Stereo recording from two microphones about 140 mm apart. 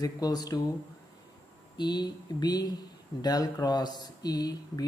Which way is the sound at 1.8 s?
30° left (ahead or behind).